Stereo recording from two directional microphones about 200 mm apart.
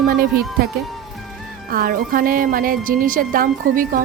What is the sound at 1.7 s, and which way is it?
A woman's voice, 45° right (ahead or behind).